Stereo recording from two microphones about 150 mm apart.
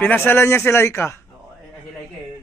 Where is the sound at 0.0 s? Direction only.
15° left (ahead or behind).